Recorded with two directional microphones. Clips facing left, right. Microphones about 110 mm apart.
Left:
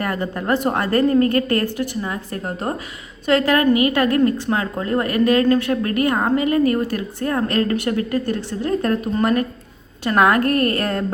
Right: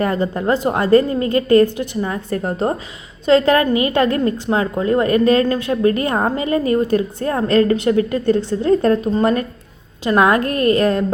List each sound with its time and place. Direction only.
0.0 s a woman's voice: 25° right (ahead or behind)